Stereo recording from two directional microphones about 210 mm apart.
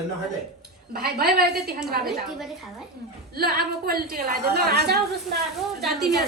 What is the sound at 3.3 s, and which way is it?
A woman's voice, 45° right (ahead or behind).